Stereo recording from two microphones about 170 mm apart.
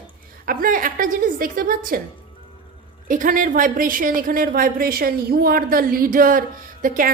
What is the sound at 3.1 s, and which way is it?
A woman's voice, 55° right (ahead or behind).